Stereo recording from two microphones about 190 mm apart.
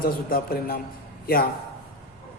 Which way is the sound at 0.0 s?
50° left (ahead or behind).